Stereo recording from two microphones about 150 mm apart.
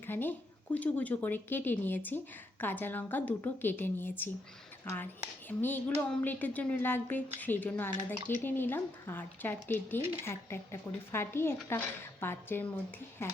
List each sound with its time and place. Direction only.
0.0 s speech: 15° left (ahead or behind)